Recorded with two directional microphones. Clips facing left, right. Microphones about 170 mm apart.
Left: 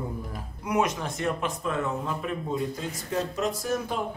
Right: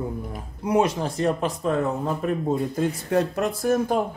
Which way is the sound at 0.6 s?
30° right (ahead or behind).